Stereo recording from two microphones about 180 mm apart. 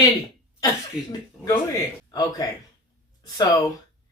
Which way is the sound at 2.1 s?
20° left (ahead or behind).